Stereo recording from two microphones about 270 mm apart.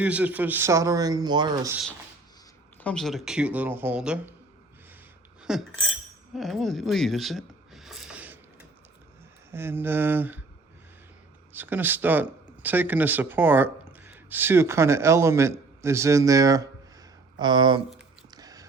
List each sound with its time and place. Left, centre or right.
0.0 s speech: centre
2.8 s speech: centre
5.4 s cutlery: centre
6.3 s a sound: centre
9.5 s speech: centre
11.5 s speech: centre
18.3 s whispering: centre